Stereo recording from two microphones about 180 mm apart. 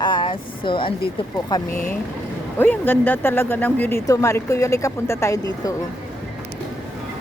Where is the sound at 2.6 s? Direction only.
10° left (ahead or behind).